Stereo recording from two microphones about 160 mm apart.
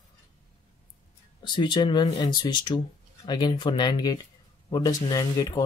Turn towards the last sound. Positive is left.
turn(degrees=20)  # may be behind; listen again after turning